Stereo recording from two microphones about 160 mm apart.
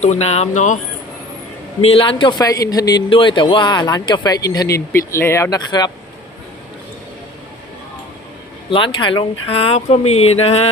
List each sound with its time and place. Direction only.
0.0 s speech: 45° left (ahead or behind)
1.8 s a man's voice: 35° left (ahead or behind)
8.7 s speech: 30° left (ahead or behind)